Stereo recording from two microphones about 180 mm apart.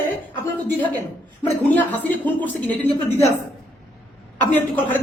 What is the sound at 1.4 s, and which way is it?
Speech, 10° left (ahead or behind).